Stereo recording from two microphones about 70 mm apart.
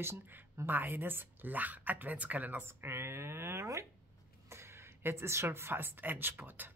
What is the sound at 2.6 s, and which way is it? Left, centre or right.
A woman's voice, right.